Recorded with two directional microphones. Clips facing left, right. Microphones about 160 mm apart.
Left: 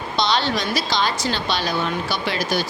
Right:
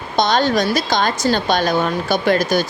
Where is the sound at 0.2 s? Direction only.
45° right (ahead or behind).